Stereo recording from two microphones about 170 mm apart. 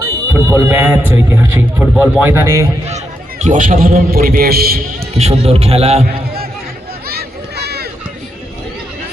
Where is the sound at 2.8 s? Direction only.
40° right (ahead or behind); by 4.8 s 65° right (ahead or behind).